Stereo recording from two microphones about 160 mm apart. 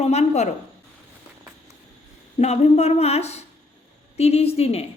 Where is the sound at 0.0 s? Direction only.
45° left (ahead or behind).